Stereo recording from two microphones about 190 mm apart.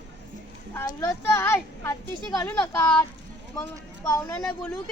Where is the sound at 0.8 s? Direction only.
15° left (ahead or behind).